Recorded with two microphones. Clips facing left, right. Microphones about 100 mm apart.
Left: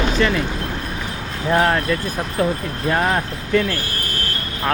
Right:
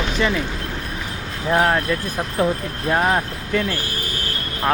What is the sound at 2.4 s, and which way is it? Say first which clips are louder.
Speech: even; 20° right (ahead or behind).